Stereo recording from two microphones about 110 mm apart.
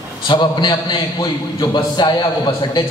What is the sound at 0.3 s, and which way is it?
A man's voice, 45° left (ahead or behind).